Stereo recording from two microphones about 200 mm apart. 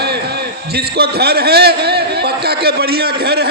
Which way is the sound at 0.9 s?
50° right (ahead or behind).